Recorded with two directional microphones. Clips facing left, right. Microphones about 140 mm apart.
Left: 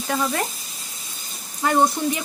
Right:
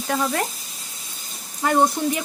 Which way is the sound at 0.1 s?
50° right (ahead or behind).